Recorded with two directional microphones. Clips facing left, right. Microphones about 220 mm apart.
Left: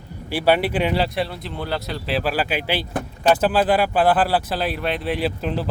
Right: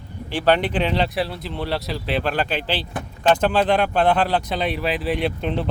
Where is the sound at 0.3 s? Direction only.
10° left (ahead or behind).